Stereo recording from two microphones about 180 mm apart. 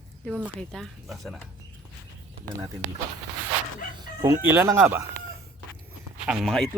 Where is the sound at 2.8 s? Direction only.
10° right (ahead or behind).